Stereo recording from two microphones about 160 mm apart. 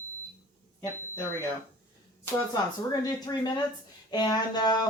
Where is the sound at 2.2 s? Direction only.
15° left (ahead or behind).